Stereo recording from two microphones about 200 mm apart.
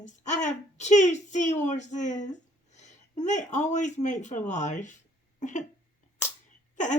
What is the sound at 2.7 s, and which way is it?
A man's voice, 35° left (ahead or behind).